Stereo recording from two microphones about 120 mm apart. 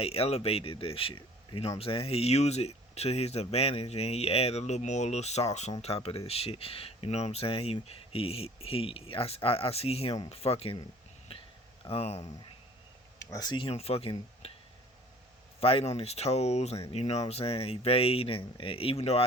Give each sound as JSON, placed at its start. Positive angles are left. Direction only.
{"t": 0.0, "sound": "speech", "side_deg": 55}
{"t": 5.8, "sound": "speech", "side_deg": 55}
{"t": 11.9, "sound": "speech", "side_deg": 55}
{"t": 13.1, "sound": "speech", "side_deg": 30}
{"t": 13.7, "sound": "speech", "side_deg": 55}
{"t": 15.6, "sound": "speech", "side_deg": 55}